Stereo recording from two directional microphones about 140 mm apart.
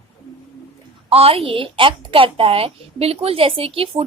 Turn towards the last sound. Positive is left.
turn(degrees=-40)  # may be behind; listen again after turning